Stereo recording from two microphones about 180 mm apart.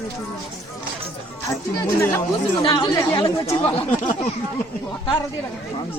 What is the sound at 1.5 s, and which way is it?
Speech, 20° left (ahead or behind).